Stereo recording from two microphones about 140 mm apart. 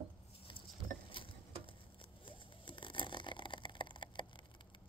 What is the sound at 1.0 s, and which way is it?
Patter, 40° left (ahead or behind).